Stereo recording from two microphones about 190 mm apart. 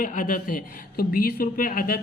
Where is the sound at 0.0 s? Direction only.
45° left (ahead or behind).